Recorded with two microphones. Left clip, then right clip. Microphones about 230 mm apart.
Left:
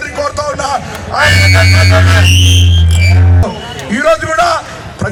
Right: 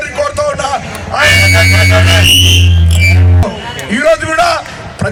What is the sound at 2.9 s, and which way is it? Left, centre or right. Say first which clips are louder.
Music: right 4 dB; right.